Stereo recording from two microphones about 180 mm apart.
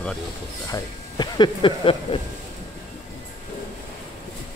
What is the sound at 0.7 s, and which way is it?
Speech, 25° left (ahead or behind).